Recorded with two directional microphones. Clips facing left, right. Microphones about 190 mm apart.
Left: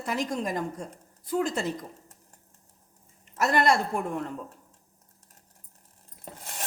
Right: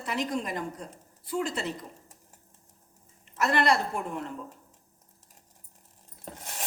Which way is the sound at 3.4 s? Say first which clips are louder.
Left 2 dB; 45° left (ahead or behind).